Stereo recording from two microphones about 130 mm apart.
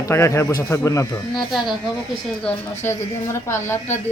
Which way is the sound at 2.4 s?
20° left (ahead or behind).